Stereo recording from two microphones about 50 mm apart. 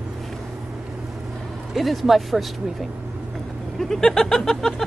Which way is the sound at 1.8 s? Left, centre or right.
Centre.